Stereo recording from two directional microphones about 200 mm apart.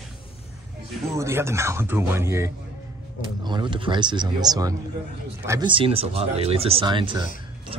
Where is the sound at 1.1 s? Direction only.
15° right (ahead or behind).